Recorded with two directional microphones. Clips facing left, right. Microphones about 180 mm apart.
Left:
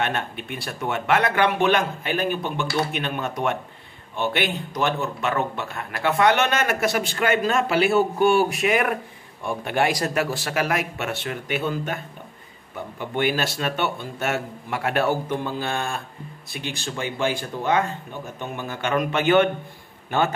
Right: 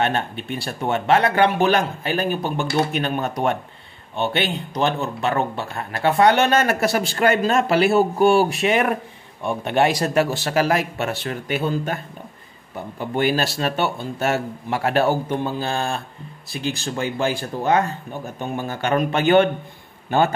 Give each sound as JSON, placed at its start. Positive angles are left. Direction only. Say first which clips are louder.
{"t": 0.0, "sound": "speech", "louder": "right 4 dB", "side_deg": -30}
{"t": 13.1, "sound": "a man's voice", "louder": "right 3 dB", "side_deg": -35}